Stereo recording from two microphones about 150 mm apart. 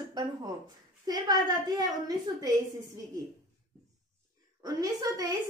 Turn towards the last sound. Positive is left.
turn(degrees=-25)  # may be behind; listen again after turning